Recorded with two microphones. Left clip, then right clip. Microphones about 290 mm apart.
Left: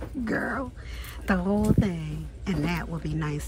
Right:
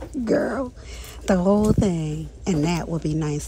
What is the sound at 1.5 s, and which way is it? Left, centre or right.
Speech, left.